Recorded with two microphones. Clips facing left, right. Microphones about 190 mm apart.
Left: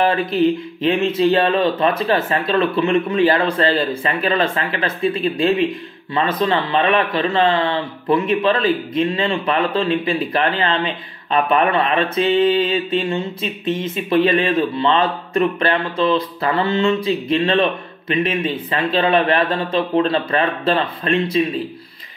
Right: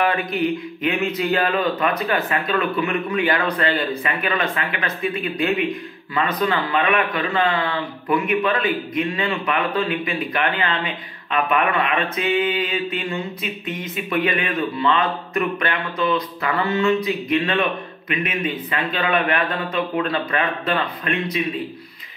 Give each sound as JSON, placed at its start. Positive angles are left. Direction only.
{"t": 0.0, "sound": "speech", "side_deg": 30}